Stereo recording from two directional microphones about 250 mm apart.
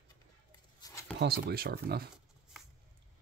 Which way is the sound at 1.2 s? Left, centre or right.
Right.